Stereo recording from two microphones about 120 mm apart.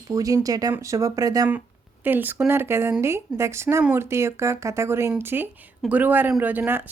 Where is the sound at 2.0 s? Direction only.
15° right (ahead or behind).